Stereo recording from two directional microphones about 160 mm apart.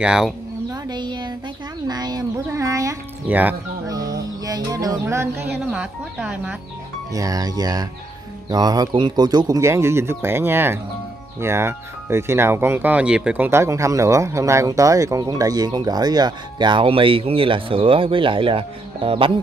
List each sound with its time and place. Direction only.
0.0 s speech: 5° right (ahead or behind)
0.7 s a sound: 25° right (ahead or behind); by 3.5 s 10° right (ahead or behind)
3.8 s music: 20° right (ahead or behind)
5.7 s speech: 5° right (ahead or behind)
7.1 s speech: 20° right (ahead or behind)